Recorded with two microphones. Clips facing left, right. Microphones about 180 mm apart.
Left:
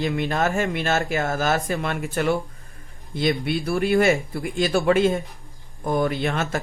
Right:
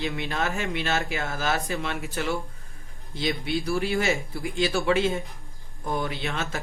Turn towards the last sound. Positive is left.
turn(degrees=50)  # may be behind; listen again after turning